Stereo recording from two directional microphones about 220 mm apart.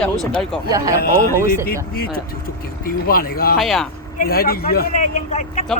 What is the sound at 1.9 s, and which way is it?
Speech, 45° left (ahead or behind).